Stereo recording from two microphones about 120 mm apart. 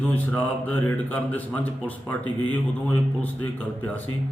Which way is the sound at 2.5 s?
10° left (ahead or behind).